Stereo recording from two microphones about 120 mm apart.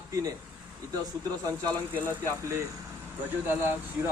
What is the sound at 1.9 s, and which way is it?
A man's voice, 20° right (ahead or behind).